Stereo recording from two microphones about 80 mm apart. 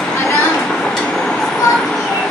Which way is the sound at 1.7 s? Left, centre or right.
Centre.